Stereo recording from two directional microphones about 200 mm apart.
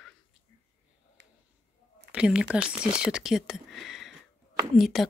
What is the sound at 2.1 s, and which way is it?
Speech, 5° right (ahead or behind).